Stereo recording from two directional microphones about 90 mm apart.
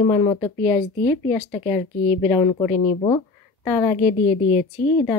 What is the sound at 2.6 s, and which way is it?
Speech, 50° left (ahead or behind).